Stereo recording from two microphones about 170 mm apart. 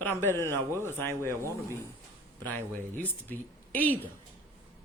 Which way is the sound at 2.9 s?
10° left (ahead or behind).